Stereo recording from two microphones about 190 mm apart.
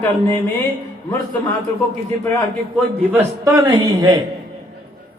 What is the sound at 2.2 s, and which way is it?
Speech, 15° left (ahead or behind).